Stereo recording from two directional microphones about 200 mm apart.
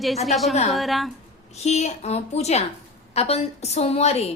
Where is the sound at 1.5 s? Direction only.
35° left (ahead or behind).